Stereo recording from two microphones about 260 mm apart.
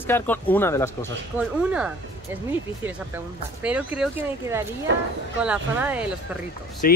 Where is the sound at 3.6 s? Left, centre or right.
Centre.